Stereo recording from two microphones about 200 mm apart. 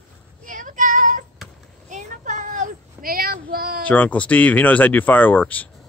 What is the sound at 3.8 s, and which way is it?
Speech, 10° left (ahead or behind).